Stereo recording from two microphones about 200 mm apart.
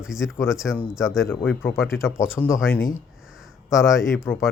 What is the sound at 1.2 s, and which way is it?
Speech, 10° left (ahead or behind).